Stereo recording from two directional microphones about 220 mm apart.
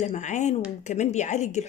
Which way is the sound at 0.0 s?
30° left (ahead or behind).